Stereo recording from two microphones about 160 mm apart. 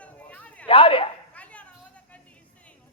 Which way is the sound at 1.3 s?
10° left (ahead or behind).